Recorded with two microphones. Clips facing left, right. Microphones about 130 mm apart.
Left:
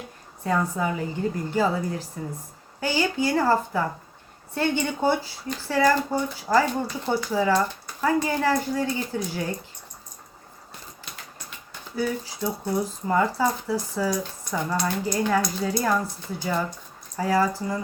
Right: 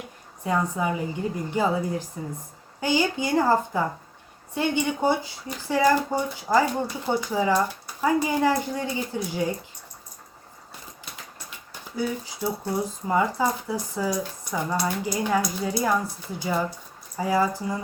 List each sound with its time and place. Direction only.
0.4 s speech: 15° right (ahead or behind)
11.9 s speech: 15° right (ahead or behind)